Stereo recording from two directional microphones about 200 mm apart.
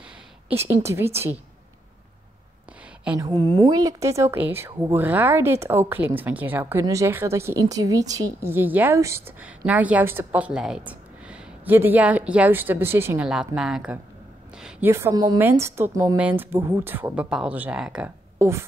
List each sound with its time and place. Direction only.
0.6 s speech: 10° right (ahead or behind)
3.2 s a woman's voice: 20° right (ahead or behind)